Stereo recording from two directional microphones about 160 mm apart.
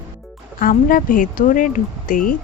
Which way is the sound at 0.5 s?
60° left (ahead or behind).